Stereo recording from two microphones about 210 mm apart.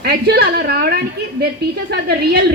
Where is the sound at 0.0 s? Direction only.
50° right (ahead or behind).